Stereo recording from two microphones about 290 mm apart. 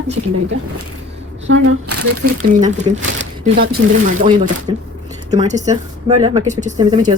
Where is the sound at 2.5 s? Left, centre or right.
Right.